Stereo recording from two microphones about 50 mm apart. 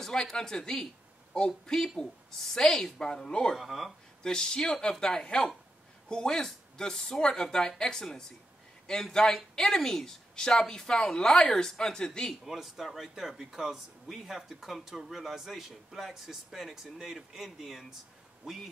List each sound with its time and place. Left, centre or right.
0.0 s speech: centre
3.5 s a man's voice: centre
4.2 s speech: centre
12.4 s a man's voice: centre